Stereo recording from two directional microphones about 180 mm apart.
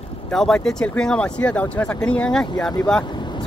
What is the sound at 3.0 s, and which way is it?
Vehicle, 25° left (ahead or behind).